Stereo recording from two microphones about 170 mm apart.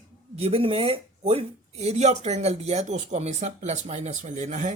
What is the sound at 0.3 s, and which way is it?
Speech, 35° right (ahead or behind).